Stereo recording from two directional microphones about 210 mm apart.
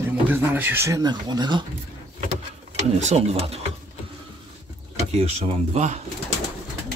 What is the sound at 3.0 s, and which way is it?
Speech, 30° right (ahead or behind).